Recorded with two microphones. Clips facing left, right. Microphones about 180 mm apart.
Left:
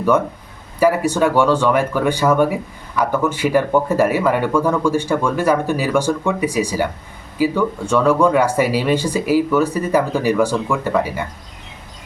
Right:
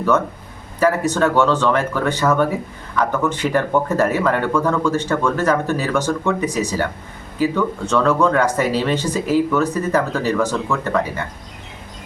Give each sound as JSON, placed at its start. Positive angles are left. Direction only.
{"t": 0.8, "sound": "speech", "side_deg": 10}